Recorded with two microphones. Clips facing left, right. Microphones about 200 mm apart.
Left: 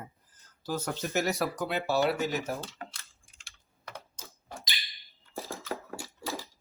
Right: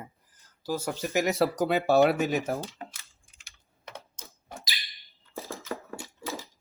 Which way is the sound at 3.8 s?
20° right (ahead or behind).